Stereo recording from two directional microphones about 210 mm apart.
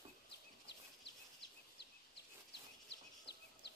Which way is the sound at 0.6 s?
55° left (ahead or behind).